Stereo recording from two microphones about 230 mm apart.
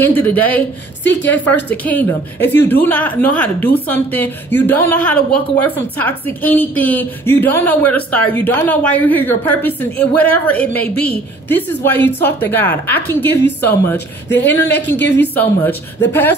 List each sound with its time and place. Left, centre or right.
0.0 s a woman's voice: centre
14.4 s a woman's voice: centre
15.0 s a woman's voice: left
15.3 s a woman's voice: centre